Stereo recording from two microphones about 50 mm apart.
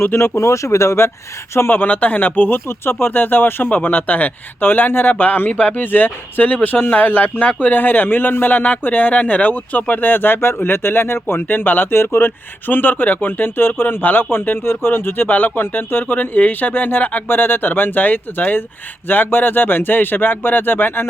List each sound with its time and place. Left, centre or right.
0.2 s speech: left
1.5 s speech: left
2.6 s speech: left